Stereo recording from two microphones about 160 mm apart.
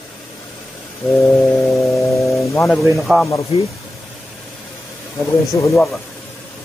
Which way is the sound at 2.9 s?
Centre (ahead or behind).